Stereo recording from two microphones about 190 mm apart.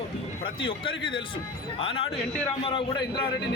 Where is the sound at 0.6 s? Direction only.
25° left (ahead or behind).